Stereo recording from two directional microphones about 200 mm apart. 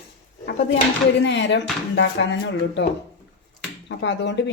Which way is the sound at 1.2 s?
65° left (ahead or behind).